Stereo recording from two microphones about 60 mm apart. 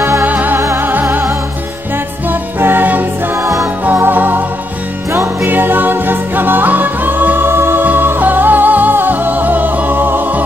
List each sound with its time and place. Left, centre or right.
0.2 s music: right
2.2 s music: right
5.1 s music: right
5.5 s music: right